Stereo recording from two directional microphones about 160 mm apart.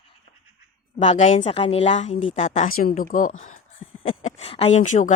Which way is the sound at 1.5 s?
40° left (ahead or behind).